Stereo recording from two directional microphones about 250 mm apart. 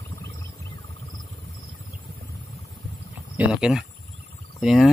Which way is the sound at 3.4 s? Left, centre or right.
Centre.